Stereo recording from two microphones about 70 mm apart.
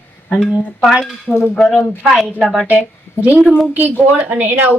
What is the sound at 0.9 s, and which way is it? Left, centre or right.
Speech, centre.